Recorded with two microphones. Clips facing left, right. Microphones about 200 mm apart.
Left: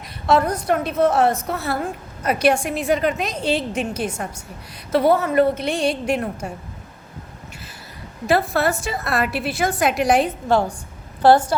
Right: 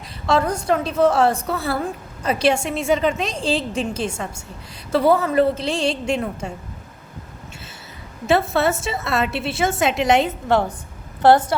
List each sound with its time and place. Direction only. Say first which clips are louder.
0.5 s a woman's voice: even; 30° right (ahead or behind)
8.3 s a woman's voice: right 1 dB; 25° right (ahead or behind)